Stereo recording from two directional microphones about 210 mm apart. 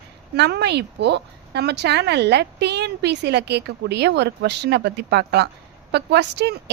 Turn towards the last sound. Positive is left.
turn(degrees=-55)  # may be behind; listen again after turning